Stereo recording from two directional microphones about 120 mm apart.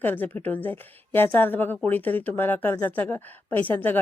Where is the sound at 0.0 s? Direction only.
15° left (ahead or behind).